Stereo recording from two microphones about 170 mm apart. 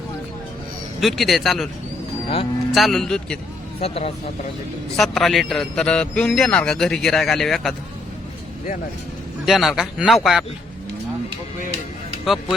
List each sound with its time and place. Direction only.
1.0 s a man's voice: centre (ahead or behind)
2.7 s a man's voice: centre (ahead or behind)
3.8 s speech: 35° left (ahead or behind)
4.9 s a man's voice: centre (ahead or behind)
9.5 s a man's voice: centre (ahead or behind)
12.2 s a man's voice: centre (ahead or behind)